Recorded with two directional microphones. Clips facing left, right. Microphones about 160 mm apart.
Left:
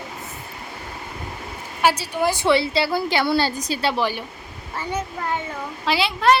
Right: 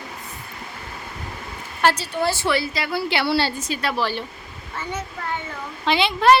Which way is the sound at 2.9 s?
45° left (ahead or behind).